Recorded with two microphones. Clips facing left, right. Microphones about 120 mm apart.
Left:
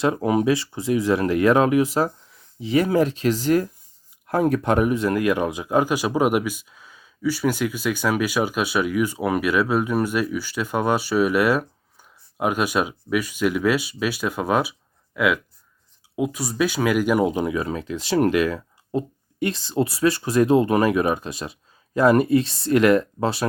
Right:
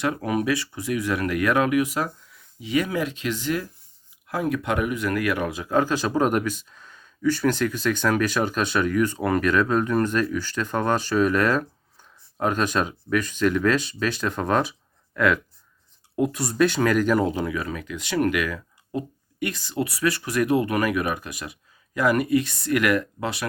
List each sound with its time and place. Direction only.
0.0 s speech: 25° left (ahead or behind)